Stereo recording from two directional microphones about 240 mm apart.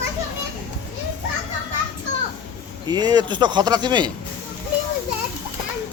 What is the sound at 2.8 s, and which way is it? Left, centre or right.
Speech, centre.